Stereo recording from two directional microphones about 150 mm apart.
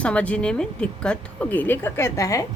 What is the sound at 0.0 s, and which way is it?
A woman's voice, 10° left (ahead or behind).